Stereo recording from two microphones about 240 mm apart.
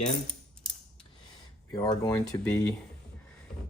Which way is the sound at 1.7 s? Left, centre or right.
Centre.